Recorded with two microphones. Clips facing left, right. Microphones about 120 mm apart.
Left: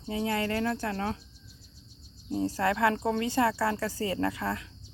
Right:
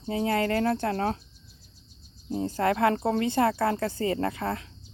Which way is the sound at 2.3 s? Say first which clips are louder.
Even; 45° right (ahead or behind).